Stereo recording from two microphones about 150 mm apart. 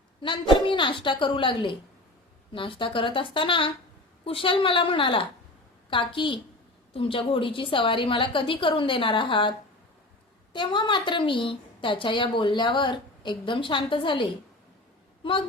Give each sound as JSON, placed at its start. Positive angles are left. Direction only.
{"t": 0.7, "sound": "a woman's voice", "side_deg": 35}